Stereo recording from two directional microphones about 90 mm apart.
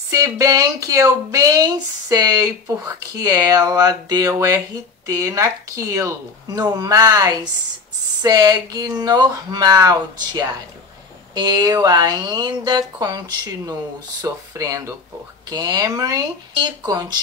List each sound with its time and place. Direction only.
0.1 s speech: 40° right (ahead or behind)
6.5 s speech: 45° right (ahead or behind)
11.3 s speech: 55° right (ahead or behind); by 15.0 s 35° right (ahead or behind)
15.5 s speech: 45° right (ahead or behind)